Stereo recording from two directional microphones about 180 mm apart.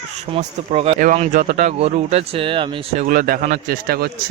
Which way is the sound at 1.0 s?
45° right (ahead or behind).